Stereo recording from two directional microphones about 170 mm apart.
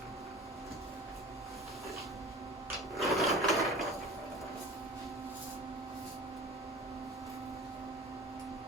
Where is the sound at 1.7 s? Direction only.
Centre (ahead or behind).